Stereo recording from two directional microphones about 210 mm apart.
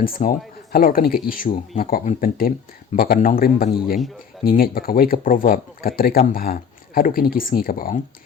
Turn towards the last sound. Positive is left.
turn(degrees=40)  # may be behind; listen again after turning